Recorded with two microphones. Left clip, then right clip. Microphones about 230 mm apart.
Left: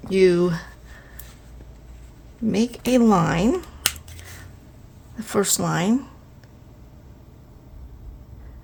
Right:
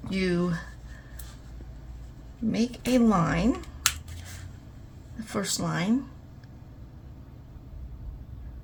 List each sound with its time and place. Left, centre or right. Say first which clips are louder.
0.1 s speech: left 12 dB; left
2.5 s speech: left 6 dB; left
5.1 s speech: left 9 dB; left